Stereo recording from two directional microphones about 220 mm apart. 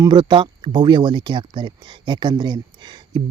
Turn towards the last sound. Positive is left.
turn(degrees=-20)  # may be behind; listen again after turning